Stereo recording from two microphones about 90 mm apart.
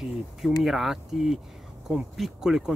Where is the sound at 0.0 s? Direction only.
5° right (ahead or behind).